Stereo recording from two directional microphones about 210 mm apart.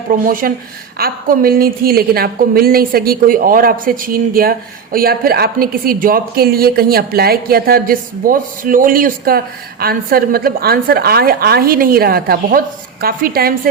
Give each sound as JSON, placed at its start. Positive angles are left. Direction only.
{"t": 0.1, "sound": "a woman's voice", "side_deg": -40}